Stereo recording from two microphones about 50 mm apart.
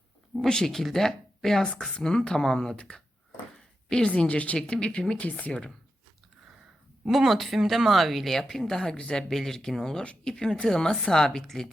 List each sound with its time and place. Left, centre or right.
0.4 s speech: centre
7.1 s speech: centre